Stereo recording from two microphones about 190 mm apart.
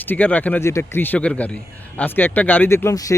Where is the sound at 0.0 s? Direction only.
10° left (ahead or behind).